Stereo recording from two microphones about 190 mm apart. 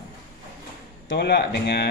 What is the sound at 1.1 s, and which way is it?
Speech, 60° left (ahead or behind).